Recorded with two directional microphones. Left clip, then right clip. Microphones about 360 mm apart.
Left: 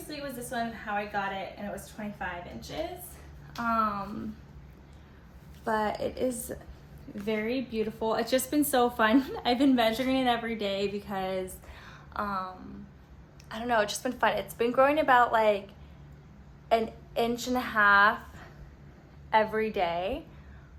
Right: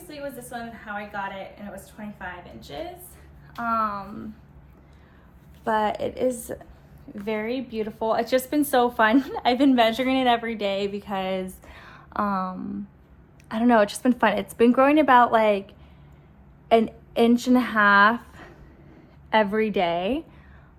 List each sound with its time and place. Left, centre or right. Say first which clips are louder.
0.1 s a woman's voice: right 2 dB; centre
6.5 s a woman's voice: right 5 dB; centre
11.3 s a sound: right 4 dB; right
13.5 s a woman's voice: right 8 dB; centre